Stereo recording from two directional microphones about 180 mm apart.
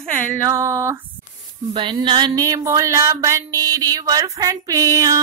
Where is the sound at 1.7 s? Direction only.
30° right (ahead or behind).